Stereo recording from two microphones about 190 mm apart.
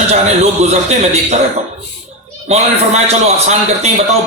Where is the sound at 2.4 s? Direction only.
35° right (ahead or behind).